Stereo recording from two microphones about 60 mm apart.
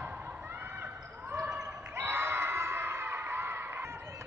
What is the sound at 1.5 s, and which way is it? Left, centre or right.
Basketball bounce, right.